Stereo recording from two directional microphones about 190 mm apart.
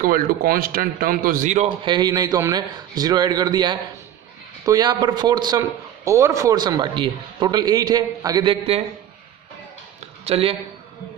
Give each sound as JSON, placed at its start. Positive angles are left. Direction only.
{"t": 0.0, "sound": "a man's voice", "side_deg": -50}
{"t": 1.9, "sound": "a man's voice", "side_deg": -20}
{"t": 10.2, "sound": "speech", "side_deg": -30}